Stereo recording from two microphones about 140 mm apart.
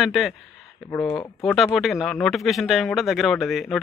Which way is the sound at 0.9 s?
20° left (ahead or behind).